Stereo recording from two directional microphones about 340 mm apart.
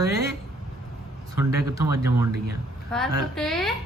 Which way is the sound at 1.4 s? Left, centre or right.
Centre.